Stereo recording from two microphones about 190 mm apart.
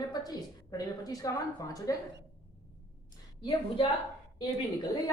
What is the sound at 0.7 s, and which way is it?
A woman's voice, 20° left (ahead or behind).